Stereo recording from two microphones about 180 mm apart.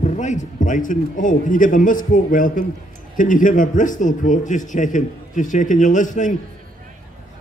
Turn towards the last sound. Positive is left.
turn(degrees=45)  # may be behind; listen again after turning